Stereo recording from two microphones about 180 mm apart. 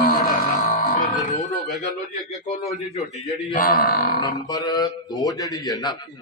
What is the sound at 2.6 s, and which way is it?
Speech, 35° left (ahead or behind).